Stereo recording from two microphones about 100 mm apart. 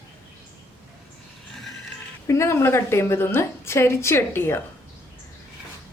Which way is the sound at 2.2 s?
30° left (ahead or behind).